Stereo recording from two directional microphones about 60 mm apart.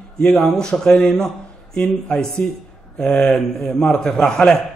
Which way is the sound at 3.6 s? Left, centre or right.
Centre.